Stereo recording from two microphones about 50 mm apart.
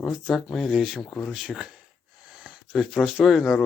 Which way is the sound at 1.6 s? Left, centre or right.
Right.